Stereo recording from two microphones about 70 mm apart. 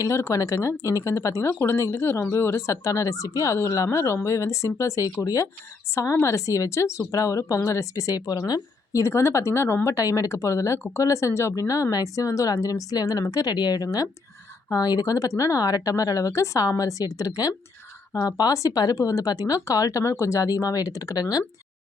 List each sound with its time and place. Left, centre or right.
0.2 s speech: left
18.1 s speech: left